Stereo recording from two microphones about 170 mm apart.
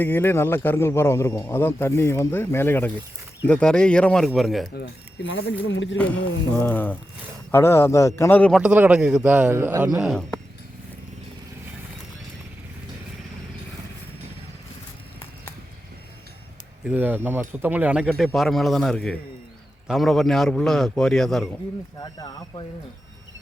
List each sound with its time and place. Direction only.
0.0 s a man's voice: 10° left (ahead or behind)
4.7 s speech: 80° left
6.6 s a man's voice: 10° left (ahead or behind)
8.6 s a man's voice: 10° right (ahead or behind)
16.8 s a man's voice: 10° right (ahead or behind)
21.9 s speech: 20° left (ahead or behind)